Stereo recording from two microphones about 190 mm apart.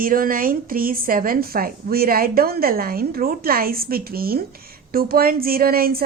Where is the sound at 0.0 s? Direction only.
45° right (ahead or behind).